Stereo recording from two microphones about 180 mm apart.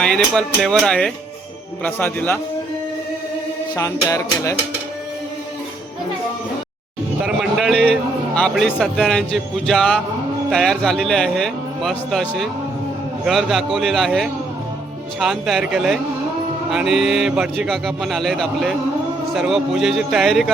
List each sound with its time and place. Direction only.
0.0 s speech: 5° left (ahead or behind)
1.8 s music: 10° left (ahead or behind)
3.8 s music: 20° left (ahead or behind)
7.2 s a sound: centre (ahead or behind)
8.4 s speech: 5° left (ahead or behind)